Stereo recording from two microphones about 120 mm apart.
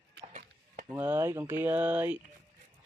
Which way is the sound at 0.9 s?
15° right (ahead or behind).